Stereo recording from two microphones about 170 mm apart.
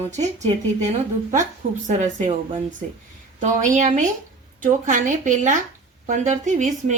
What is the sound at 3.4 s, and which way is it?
A woman's voice, 45° right (ahead or behind).